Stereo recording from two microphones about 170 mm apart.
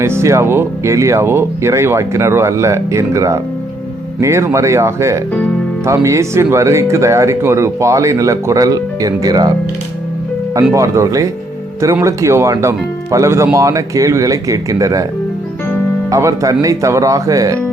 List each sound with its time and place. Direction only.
0.0 s speech: 15° right (ahead or behind)
16.0 s speech: 20° right (ahead or behind)